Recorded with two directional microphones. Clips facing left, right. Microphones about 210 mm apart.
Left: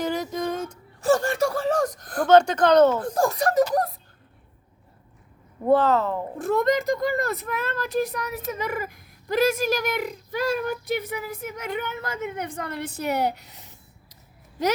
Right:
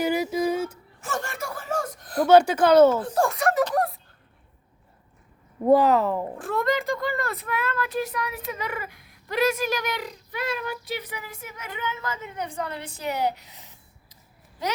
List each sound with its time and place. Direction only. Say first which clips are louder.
0.0 s a sound: right 3 dB; 10° right (ahead or behind)
1.0 s speech: left 11 dB; 35° left (ahead or behind)
2.2 s speech: even; 10° right (ahead or behind)
3.2 s speech: left 1 dB; 35° left (ahead or behind)
5.6 s speech: right 1 dB; 15° right (ahead or behind)
6.4 s speech: left 6 dB; 40° left (ahead or behind); by 12.5 s 65° left (ahead or behind)